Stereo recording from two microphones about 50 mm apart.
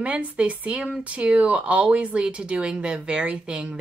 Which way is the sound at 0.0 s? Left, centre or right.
Right.